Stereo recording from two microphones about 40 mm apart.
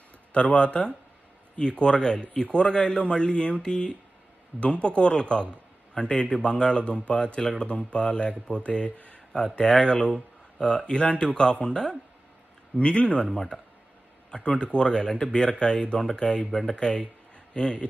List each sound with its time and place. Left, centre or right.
0.3 s a man's voice: left
9.3 s a man's voice: left
16.5 s speech: centre
16.7 s a man's voice: left